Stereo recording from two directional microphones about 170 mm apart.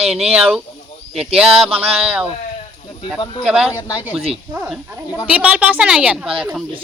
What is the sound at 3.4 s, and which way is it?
Speech, 5° right (ahead or behind).